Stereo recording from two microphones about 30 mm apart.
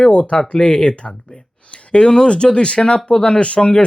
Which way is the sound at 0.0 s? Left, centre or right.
Left.